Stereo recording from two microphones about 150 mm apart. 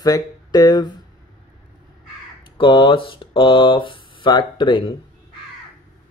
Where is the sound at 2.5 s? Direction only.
35° left (ahead or behind).